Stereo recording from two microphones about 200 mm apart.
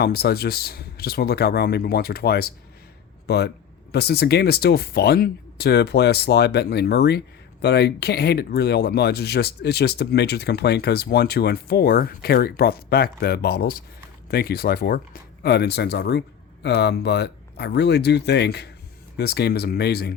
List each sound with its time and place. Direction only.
0.0 s speech: 55° left (ahead or behind)